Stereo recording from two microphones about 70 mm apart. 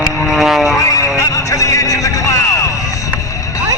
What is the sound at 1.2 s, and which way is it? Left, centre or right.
Music, left.